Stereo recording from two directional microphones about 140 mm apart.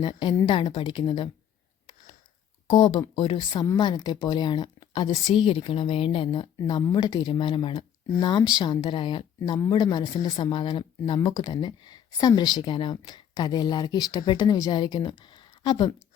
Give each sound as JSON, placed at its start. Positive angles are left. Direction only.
{"t": 0.0, "sound": "speech", "side_deg": 30}
{"t": 2.6, "sound": "speech", "side_deg": 35}
{"t": 15.2, "sound": "a sound", "side_deg": 35}